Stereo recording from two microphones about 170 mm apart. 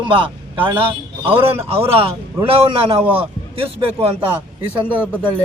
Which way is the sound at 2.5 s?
35° right (ahead or behind).